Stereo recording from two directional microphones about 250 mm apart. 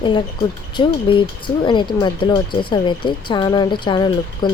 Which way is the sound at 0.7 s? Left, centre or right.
Centre.